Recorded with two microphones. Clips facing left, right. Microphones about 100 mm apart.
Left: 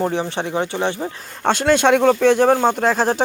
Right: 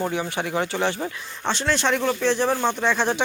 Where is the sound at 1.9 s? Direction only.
75° left (ahead or behind); by 3.2 s 40° left (ahead or behind).